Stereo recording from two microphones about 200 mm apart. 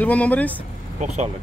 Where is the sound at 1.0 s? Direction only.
35° right (ahead or behind).